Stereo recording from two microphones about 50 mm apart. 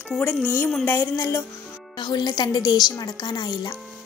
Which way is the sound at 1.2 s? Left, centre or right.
Left.